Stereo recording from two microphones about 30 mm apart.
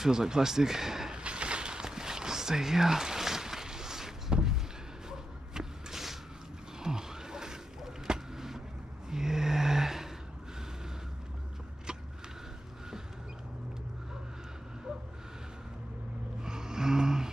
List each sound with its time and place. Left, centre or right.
0.0 s speech: centre
1.1 s a sound: right; by 10.0 s centre
16.4 s gasp: right